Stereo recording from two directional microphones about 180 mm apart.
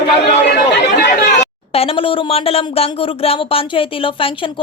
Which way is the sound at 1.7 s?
30° left (ahead or behind).